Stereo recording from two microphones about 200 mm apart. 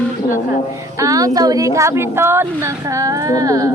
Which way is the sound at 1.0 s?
15° right (ahead or behind).